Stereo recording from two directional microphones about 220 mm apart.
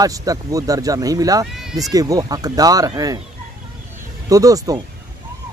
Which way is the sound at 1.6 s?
Centre (ahead or behind).